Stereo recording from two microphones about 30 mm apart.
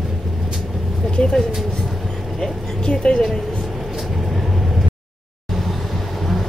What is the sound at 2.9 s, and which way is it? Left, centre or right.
Speech, left.